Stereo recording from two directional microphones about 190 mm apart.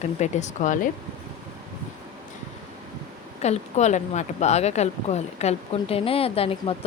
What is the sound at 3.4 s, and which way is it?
Speech, 35° left (ahead or behind).